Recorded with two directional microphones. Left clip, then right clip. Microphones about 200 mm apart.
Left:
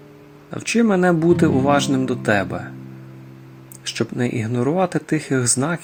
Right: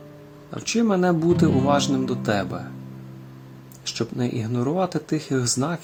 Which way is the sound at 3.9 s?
15° left (ahead or behind).